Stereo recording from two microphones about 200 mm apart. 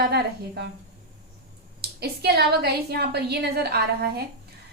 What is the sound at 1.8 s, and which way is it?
A woman's voice, 55° right (ahead or behind).